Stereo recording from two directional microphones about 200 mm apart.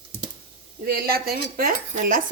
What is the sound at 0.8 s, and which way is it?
Speech, 50° right (ahead or behind).